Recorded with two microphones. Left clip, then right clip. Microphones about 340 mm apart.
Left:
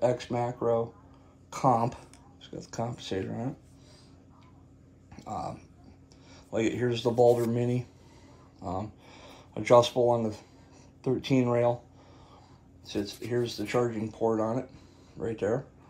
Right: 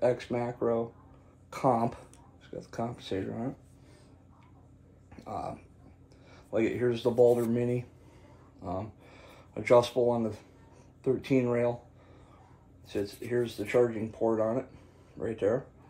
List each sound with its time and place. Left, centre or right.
0.0 s speech: left
5.1 s a sound: left
6.3 s speech: left
13.0 s speech: left